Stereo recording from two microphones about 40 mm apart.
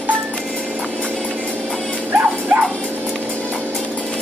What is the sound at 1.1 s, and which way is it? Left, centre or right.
Vehicle, centre.